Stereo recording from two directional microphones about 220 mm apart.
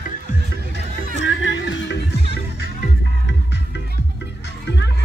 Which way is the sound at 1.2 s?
55° left (ahead or behind).